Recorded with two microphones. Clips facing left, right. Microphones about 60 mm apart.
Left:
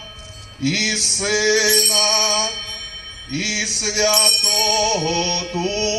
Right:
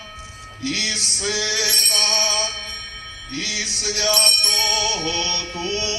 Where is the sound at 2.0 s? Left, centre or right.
Left.